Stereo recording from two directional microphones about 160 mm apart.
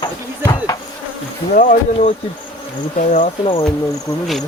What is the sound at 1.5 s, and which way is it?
Speech, 55° left (ahead or behind).